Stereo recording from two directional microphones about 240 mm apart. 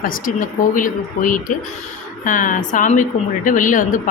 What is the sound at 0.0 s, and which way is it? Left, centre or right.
Speech, left.